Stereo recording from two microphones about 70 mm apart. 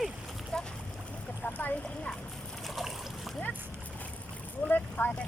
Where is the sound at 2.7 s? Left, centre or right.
Centre.